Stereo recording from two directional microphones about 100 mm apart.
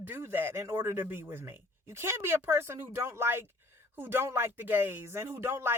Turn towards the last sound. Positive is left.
turn(degrees=-25)  # may be behind; listen again after turning